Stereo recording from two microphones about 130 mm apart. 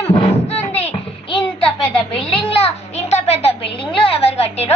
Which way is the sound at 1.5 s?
45° left (ahead or behind).